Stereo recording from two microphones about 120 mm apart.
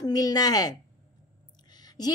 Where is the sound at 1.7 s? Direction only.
35° left (ahead or behind).